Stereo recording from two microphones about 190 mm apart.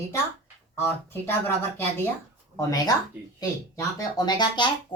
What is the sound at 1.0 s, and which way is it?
Speech, 10° left (ahead or behind).